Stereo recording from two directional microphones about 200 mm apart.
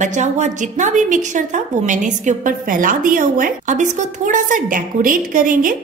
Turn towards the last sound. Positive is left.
turn(degrees=-45)  # may be behind; listen again after turning